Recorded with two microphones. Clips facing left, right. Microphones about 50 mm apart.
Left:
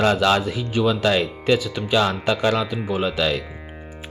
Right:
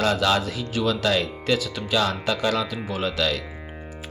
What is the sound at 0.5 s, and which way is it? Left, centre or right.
Speech, centre.